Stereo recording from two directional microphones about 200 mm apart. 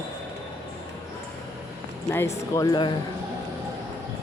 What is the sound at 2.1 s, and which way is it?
Speech, 10° left (ahead or behind).